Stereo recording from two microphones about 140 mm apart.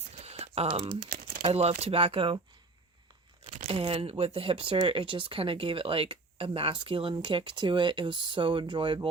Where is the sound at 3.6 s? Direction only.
40° right (ahead or behind).